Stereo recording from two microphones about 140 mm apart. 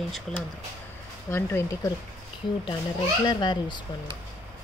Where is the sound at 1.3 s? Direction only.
15° left (ahead or behind).